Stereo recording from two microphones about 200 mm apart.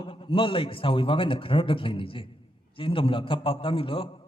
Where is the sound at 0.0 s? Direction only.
25° left (ahead or behind).